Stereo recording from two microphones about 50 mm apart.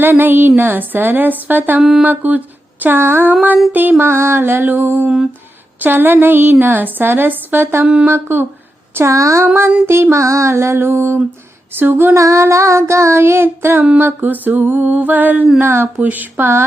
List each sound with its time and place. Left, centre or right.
0.0 s a woman's voice: right
1.8 s a sound: centre
2.0 s a woman's voice: right
2.8 s a woman's voice: right
3.7 s a woman's voice: right
9.0 s a sound: right
9.8 s music: right
11.7 s a woman's voice: right
12.1 s child singing: right
14.0 s a woman's voice: right
15.6 s a woman's voice: right
16.0 s a woman's voice: right